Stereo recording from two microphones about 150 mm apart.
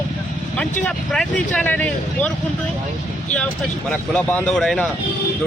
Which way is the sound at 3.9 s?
10° left (ahead or behind).